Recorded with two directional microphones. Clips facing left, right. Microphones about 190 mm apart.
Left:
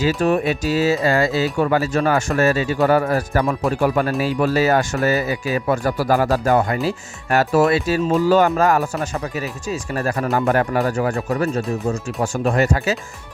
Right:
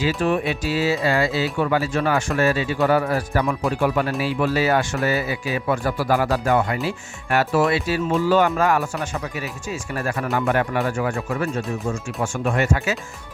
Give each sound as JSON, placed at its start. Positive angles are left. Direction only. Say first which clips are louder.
{"t": 0.0, "sound": "speech", "louder": "left 3 dB", "side_deg": 40}